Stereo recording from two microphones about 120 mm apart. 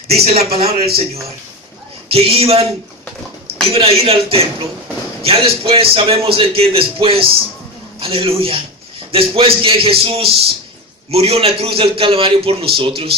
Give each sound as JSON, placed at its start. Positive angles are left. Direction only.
{"t": 0.3, "sound": "a man's voice", "side_deg": -55}
{"t": 3.7, "sound": "a man's voice", "side_deg": -55}